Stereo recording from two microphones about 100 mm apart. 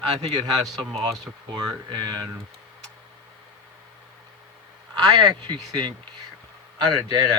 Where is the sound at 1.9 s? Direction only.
45° right (ahead or behind).